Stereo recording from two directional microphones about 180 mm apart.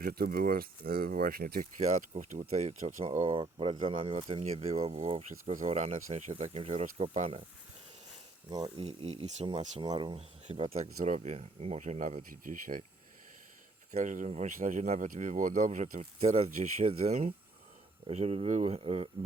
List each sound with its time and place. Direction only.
0.0 s speech: 55° right (ahead or behind); by 7.4 s 35° right (ahead or behind)
8.4 s speech: 20° right (ahead or behind)
8.8 s speech: 35° right (ahead or behind)
9.8 s speech: 25° right (ahead or behind); by 12.8 s 50° right (ahead or behind)
13.9 s speech: 45° right (ahead or behind)